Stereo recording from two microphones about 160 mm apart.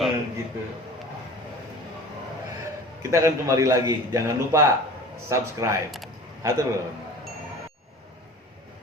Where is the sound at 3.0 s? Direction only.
20° right (ahead or behind).